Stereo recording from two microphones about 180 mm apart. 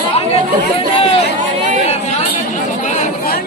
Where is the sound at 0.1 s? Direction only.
35° left (ahead or behind).